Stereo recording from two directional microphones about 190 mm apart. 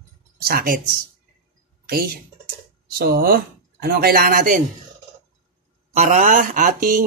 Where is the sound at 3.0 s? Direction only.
55° right (ahead or behind).